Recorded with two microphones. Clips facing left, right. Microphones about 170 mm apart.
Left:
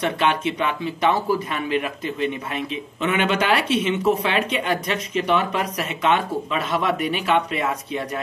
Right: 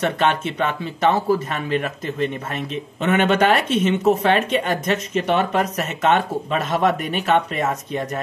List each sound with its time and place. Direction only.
0.6 s speech: 45° right (ahead or behind)